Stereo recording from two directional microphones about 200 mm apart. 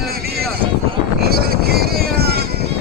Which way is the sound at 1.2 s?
50° right (ahead or behind).